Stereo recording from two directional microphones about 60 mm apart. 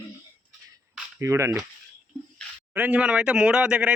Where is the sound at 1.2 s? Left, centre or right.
Right.